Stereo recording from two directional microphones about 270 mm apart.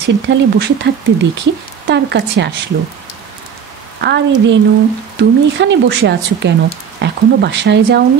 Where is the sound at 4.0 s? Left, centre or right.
Right.